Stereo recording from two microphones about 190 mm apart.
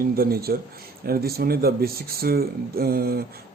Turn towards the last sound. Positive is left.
turn(degrees=-55)  # may be behind; listen again after turning